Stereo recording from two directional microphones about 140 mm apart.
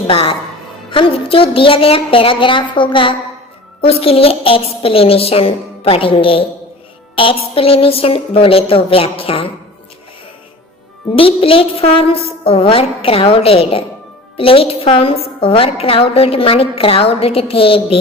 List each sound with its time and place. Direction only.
0.1 s a woman's voice: 40° left (ahead or behind)
11.1 s a woman's voice: 40° left (ahead or behind)